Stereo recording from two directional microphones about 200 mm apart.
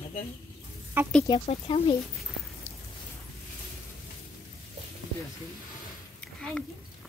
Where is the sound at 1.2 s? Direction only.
25° left (ahead or behind).